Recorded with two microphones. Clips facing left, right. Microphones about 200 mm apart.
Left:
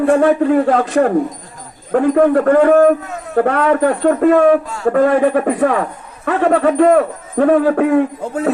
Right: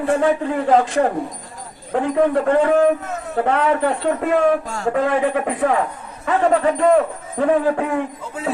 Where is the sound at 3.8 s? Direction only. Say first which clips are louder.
Left 7 dB; 45° left (ahead or behind).